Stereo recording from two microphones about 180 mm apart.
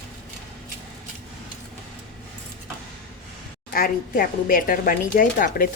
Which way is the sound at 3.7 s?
55° left (ahead or behind).